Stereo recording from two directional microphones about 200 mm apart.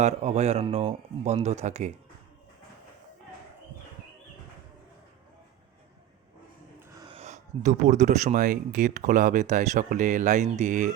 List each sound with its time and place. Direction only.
0.0 s speech: 35° right (ahead or behind)
7.1 s speech: 35° right (ahead or behind)